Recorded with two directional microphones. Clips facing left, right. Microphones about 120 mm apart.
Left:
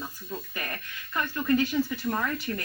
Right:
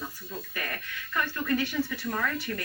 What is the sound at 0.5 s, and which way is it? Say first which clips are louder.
A woman's voice: right 1 dB; 25° left (ahead or behind).